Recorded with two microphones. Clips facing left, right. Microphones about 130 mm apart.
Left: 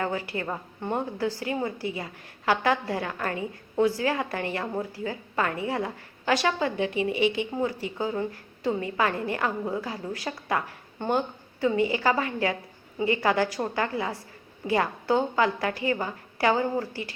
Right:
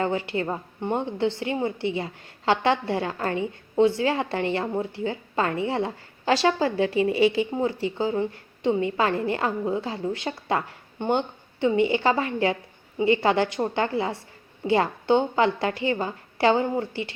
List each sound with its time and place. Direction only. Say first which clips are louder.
0.0 s a woman's voice: right 4 dB; 25° right (ahead or behind)